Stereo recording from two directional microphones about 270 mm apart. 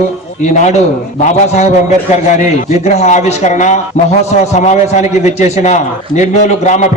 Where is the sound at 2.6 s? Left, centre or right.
Left.